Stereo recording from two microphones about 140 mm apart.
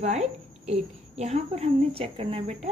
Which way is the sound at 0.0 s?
50° right (ahead or behind).